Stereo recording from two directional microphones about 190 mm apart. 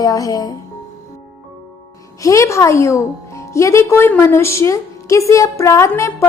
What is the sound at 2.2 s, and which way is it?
A woman's voice, 15° left (ahead or behind).